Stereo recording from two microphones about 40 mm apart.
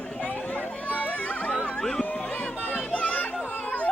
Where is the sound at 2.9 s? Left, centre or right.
Left.